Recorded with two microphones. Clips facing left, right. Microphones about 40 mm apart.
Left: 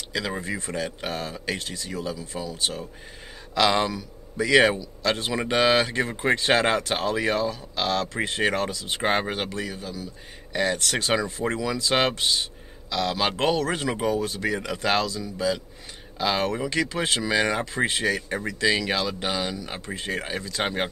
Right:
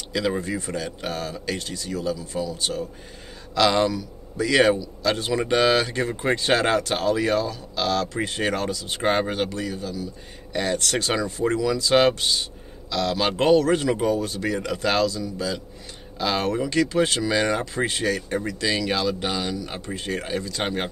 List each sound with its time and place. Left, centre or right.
0.1 s speech: centre